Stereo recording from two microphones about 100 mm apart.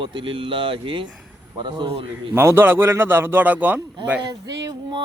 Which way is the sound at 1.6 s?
50° right (ahead or behind).